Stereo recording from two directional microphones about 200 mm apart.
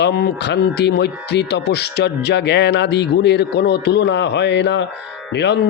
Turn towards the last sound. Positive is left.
turn(degrees=60)  # may be behind; listen again after turning